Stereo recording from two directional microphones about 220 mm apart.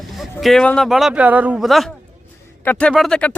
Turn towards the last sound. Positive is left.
turn(degrees=5)  # may be behind; listen again after turning